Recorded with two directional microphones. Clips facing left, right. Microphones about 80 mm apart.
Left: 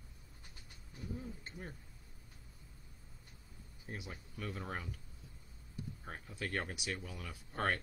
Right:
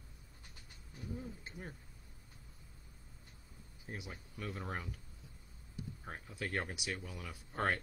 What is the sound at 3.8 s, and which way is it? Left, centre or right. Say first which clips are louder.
Speech: even; centre.